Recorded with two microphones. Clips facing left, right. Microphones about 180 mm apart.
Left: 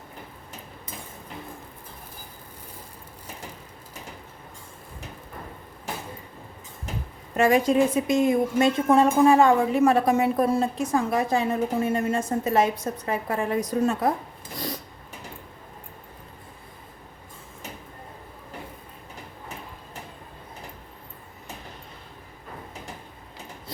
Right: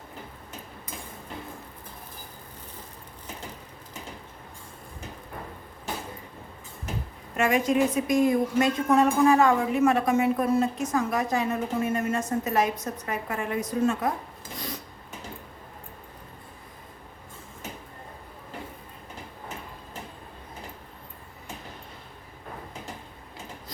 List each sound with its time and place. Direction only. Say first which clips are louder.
7.3 s a woman's voice: left 4 dB; 35° left (ahead or behind)